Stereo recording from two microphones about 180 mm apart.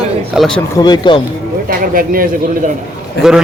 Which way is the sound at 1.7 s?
55° right (ahead or behind).